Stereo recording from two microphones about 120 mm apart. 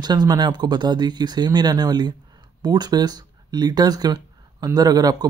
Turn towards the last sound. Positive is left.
turn(degrees=-30)  # may be behind; listen again after turning